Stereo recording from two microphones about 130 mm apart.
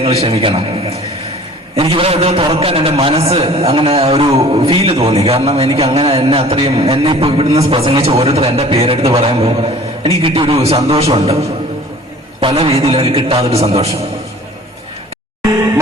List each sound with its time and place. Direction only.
0.0 s a man's voice: 50° right (ahead or behind)
12.4 s a man's voice: 45° right (ahead or behind)